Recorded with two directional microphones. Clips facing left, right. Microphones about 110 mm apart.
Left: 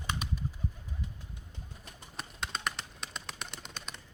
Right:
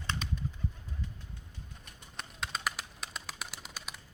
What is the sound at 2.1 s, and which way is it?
Bird, centre (ahead or behind).